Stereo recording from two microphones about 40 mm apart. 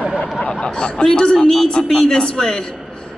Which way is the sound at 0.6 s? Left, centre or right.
Left.